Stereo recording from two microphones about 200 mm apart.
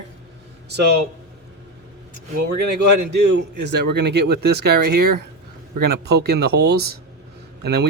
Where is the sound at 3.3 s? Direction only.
60° right (ahead or behind).